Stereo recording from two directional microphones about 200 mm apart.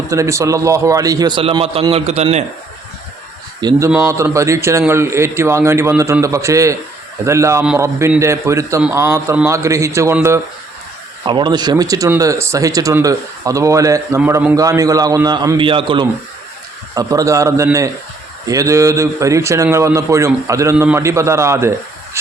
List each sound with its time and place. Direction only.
0.1 s a man's voice: 15° right (ahead or behind); by 2.4 s 30° right (ahead or behind)
3.6 s speech: 15° right (ahead or behind)
11.3 s speech: 25° right (ahead or behind)